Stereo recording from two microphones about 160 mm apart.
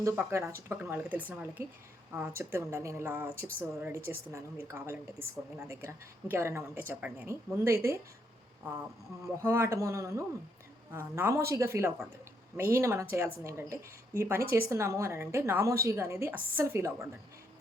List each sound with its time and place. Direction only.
0.0 s a woman's voice: 15° right (ahead or behind)
9.2 s a woman's voice: 20° right (ahead or behind)